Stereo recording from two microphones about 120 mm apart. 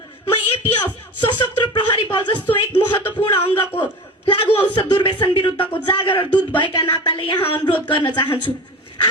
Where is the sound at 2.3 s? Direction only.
15° left (ahead or behind).